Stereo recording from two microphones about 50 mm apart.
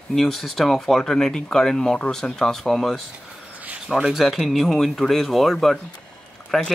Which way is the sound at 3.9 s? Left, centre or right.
Centre.